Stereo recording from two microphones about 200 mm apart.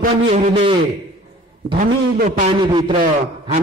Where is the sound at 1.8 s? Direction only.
45° right (ahead or behind).